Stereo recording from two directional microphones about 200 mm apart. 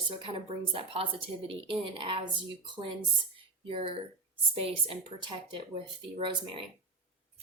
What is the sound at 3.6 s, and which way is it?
A woman's voice, 25° right (ahead or behind).